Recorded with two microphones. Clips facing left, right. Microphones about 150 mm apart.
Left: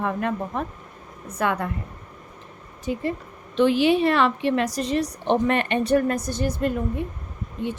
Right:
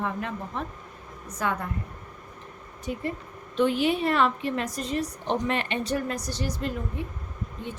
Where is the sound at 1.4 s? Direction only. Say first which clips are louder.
Left 5 dB; 70° left (ahead or behind).